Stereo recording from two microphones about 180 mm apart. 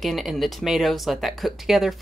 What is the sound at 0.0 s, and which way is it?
Speech, centre (ahead or behind).